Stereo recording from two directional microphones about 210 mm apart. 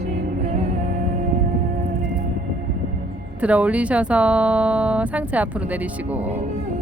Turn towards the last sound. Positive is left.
turn(degrees=-5)  # may be behind; listen again after turning